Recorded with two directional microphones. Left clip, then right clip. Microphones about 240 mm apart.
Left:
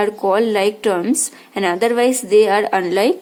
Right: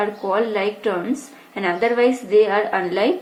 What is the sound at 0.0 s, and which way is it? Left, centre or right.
A woman's voice, left.